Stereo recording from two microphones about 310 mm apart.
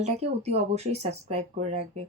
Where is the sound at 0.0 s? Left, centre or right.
Right.